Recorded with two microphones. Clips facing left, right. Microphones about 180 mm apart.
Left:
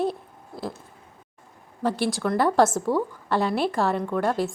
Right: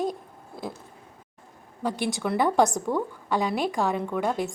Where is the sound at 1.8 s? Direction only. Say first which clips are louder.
Left 3 dB; 15° right (ahead or behind).